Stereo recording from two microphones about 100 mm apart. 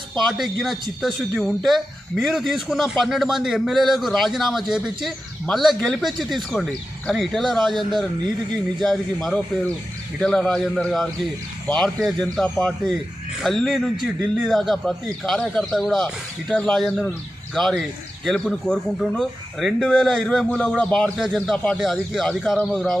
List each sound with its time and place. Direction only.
0.1 s a man's voice: centre (ahead or behind)
22.1 s speech: centre (ahead or behind)